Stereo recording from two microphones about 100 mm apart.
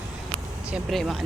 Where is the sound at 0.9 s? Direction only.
Centre (ahead or behind).